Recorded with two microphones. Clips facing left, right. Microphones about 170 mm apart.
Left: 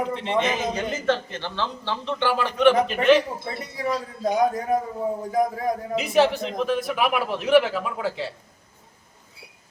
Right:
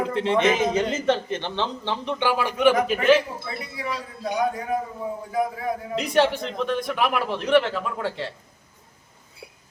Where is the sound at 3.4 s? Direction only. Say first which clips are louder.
Left 3 dB; 40° left (ahead or behind).